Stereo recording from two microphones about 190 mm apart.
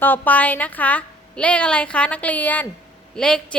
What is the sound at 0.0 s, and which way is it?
A woman's voice, 10° left (ahead or behind).